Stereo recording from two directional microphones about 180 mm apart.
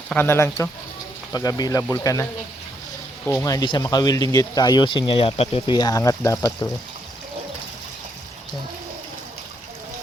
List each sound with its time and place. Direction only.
0.1 s speech: 10° left (ahead or behind)
3.2 s speech: 15° left (ahead or behind)